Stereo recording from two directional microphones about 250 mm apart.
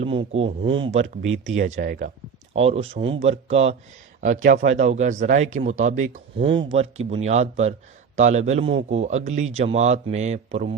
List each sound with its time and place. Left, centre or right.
0.0 s speech: right